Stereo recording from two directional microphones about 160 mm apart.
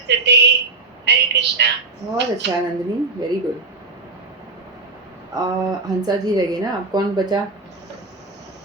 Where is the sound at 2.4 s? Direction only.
90° right.